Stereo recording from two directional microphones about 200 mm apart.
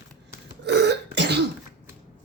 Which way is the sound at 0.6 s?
55° right (ahead or behind).